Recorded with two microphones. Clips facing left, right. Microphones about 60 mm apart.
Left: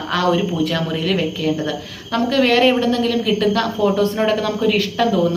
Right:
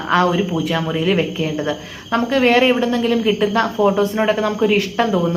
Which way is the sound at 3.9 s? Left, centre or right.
Centre.